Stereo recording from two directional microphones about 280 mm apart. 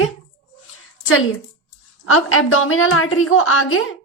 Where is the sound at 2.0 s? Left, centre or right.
Left.